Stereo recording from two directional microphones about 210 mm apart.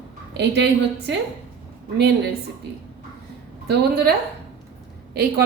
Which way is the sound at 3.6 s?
50° right (ahead or behind).